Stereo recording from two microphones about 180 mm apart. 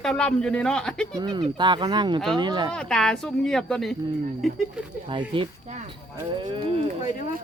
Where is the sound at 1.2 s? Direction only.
25° right (ahead or behind).